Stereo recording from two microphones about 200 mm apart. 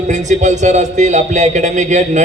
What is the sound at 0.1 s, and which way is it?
A man's voice, 35° right (ahead or behind).